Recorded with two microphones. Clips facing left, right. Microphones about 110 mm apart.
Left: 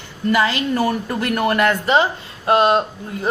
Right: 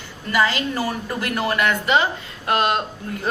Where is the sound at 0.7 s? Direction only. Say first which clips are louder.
Left 5 dB; 55° left (ahead or behind).